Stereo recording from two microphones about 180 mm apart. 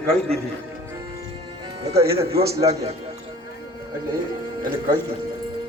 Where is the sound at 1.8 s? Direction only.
35° right (ahead or behind).